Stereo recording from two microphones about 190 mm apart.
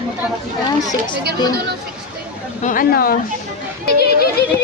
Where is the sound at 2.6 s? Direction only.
45° left (ahead or behind).